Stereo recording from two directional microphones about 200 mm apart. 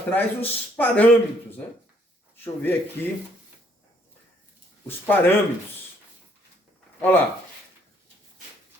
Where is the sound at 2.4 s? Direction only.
10° left (ahead or behind).